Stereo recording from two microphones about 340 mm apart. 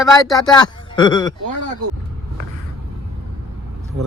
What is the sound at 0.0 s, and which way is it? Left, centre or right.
Speech, centre.